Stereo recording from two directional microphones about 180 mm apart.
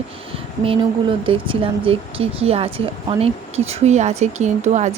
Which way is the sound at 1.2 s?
30° right (ahead or behind).